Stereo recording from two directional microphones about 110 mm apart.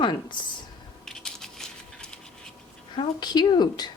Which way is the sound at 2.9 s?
40° left (ahead or behind).